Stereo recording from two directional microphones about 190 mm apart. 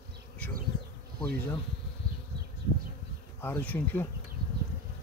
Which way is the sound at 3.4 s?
10° left (ahead or behind).